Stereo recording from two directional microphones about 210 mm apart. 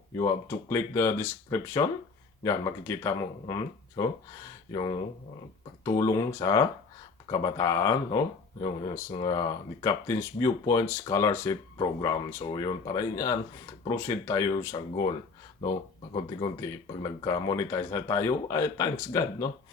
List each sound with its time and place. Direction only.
0.2 s speech: 10° left (ahead or behind)
16.1 s speech: 20° left (ahead or behind)